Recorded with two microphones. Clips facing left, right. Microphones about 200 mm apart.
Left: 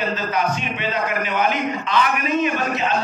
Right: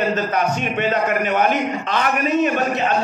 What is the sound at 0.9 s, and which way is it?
A man's voice, 50° right (ahead or behind).